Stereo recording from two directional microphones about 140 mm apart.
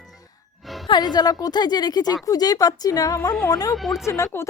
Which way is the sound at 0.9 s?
30° left (ahead or behind).